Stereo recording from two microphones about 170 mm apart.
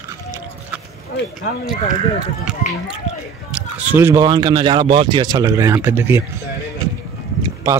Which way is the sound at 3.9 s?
15° right (ahead or behind).